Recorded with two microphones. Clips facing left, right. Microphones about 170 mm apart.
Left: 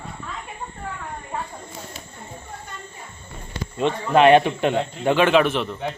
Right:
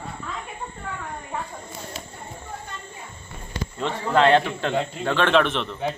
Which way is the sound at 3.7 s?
20° left (ahead or behind).